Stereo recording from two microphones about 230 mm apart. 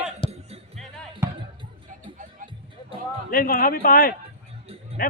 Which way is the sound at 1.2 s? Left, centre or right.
Centre.